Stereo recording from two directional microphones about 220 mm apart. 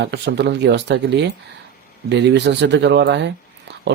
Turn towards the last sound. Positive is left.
turn(degrees=-50)  # may be behind; listen again after turning